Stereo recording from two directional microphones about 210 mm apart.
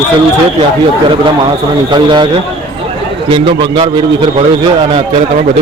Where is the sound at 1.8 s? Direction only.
20° right (ahead or behind).